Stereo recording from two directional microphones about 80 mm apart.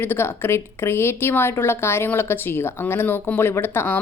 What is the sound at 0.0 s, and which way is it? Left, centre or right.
A woman's voice, left.